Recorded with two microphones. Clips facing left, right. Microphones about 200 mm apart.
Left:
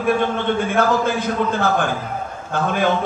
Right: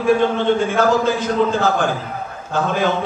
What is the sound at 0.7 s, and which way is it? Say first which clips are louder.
A man's voice: right 2 dB; 55° left (ahead or behind).